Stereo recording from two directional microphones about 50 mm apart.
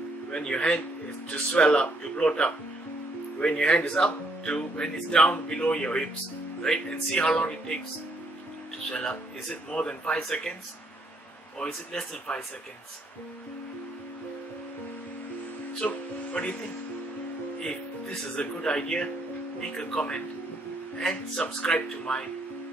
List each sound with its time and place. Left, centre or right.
0.3 s speech: centre
1.3 s speech: left
1.7 s speech: centre
8.9 s speech: left
11.6 s speech: centre
15.8 s speech: centre
18.3 s speech: centre